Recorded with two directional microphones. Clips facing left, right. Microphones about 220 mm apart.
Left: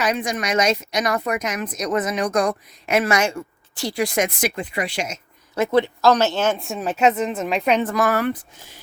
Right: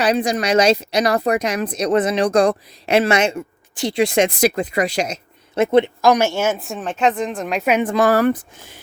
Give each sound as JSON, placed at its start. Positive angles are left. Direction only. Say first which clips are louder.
{"t": 0.0, "sound": "a woman's voice", "louder": "right 5 dB", "side_deg": -35}
{"t": 5.7, "sound": "speech", "louder": "right 2 dB", "side_deg": -15}
{"t": 7.9, "sound": "a woman's voice", "louder": "right 5 dB", "side_deg": -35}